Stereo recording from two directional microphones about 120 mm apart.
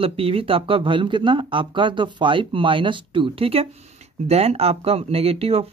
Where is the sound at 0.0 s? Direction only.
50° right (ahead or behind).